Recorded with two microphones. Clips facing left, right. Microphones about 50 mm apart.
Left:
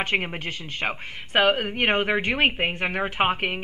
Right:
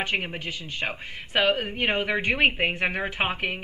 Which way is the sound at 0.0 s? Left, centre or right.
Left.